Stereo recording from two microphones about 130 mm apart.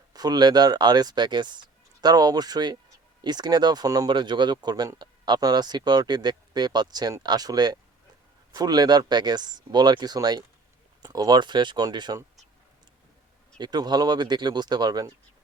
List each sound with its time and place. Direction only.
0.1 s speech: 30° right (ahead or behind)
13.6 s speech: 35° right (ahead or behind)